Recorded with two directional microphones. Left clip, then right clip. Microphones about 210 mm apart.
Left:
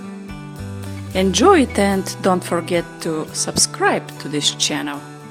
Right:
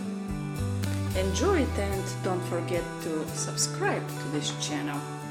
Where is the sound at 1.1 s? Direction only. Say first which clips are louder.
Left 14 dB; 55° left (ahead or behind).